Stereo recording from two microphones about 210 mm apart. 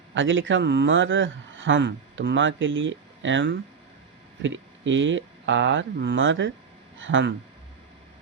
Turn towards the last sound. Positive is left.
turn(degrees=-65)  # may be behind; listen again after turning